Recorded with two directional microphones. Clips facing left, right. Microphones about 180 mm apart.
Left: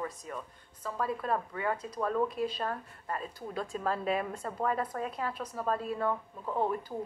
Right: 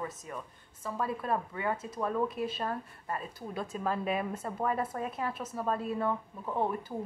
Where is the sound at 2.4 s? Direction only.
30° left (ahead or behind).